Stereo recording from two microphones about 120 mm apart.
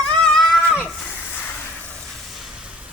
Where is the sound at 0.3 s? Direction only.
Centre (ahead or behind).